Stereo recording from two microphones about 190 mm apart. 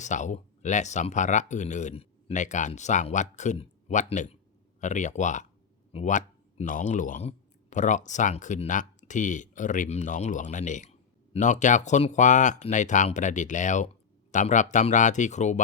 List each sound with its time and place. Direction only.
0.0 s speech: 40° left (ahead or behind)